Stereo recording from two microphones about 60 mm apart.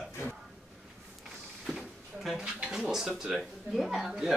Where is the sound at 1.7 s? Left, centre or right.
Centre.